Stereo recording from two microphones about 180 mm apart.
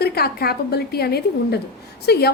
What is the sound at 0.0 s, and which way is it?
A woman's voice, 60° left (ahead or behind).